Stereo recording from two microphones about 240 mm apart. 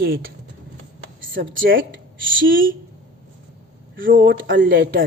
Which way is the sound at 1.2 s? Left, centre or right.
Right.